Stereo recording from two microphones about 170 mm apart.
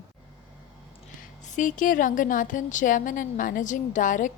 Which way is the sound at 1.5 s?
50° left (ahead or behind).